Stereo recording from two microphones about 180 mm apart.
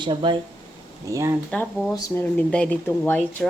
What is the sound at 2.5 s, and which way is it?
Speech, 5° left (ahead or behind).